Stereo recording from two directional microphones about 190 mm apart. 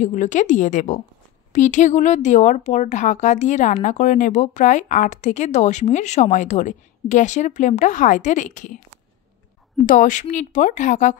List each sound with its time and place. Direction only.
0.0 s a woman's voice: 40° left (ahead or behind)
9.8 s a woman's voice: 40° left (ahead or behind)